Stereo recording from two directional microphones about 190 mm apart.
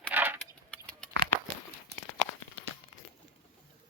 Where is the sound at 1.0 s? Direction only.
5° left (ahead or behind).